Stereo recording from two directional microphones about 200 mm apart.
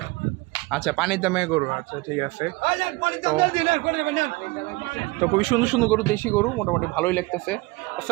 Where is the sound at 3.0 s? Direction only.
25° right (ahead or behind).